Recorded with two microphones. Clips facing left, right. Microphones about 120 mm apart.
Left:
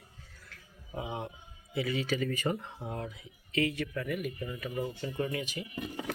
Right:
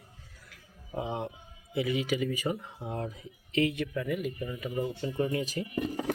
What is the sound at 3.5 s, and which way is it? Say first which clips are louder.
Speech: right 3 dB; 20° right (ahead or behind).